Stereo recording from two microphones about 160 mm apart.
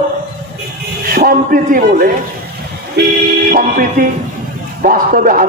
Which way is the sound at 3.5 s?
60° right (ahead or behind).